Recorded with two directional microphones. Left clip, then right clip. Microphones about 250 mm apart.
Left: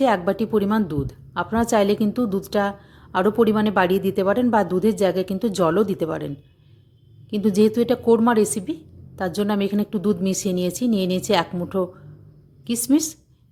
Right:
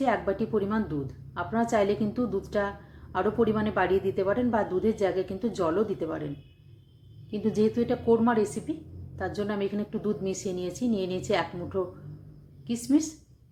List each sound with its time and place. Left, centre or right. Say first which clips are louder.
0.0 s a woman's voice: left 7 dB; left
7.3 s a woman's voice: left 7 dB; left